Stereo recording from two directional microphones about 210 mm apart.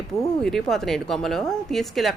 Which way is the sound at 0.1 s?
Centre (ahead or behind).